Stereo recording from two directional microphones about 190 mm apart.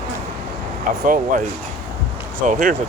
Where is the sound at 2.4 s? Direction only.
45° right (ahead or behind).